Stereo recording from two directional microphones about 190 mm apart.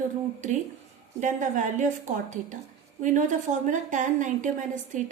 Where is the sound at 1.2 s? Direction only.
40° right (ahead or behind).